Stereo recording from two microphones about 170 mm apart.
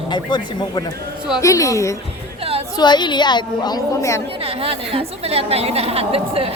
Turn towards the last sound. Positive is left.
turn(degrees=-35)  # may be behind; listen again after turning